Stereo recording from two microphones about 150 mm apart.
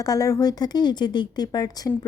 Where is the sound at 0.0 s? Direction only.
20° left (ahead or behind).